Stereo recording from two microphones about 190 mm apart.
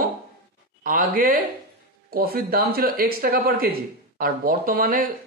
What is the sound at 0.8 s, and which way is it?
Speech, 45° right (ahead or behind).